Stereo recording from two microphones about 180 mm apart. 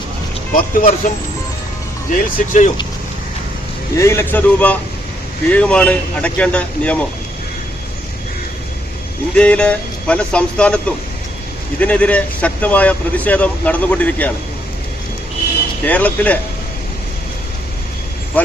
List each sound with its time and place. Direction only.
0.5 s speech: 45° left (ahead or behind)
3.9 s speech: 15° left (ahead or behind)
9.3 s speech: 5° left (ahead or behind)
15.8 s speech: 10° left (ahead or behind)